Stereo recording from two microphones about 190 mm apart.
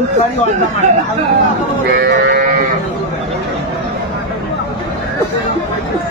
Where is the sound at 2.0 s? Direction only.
60° right (ahead or behind).